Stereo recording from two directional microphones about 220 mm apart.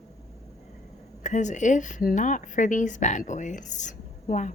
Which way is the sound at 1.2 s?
35° left (ahead or behind).